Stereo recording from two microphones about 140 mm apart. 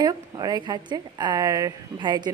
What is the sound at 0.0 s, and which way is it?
A woman's voice, 30° right (ahead or behind).